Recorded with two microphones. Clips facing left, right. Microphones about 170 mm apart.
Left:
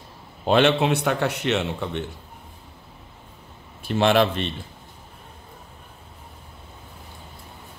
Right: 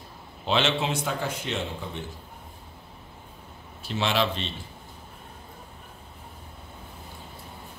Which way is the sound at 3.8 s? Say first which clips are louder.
Left 7 dB; 55° left (ahead or behind).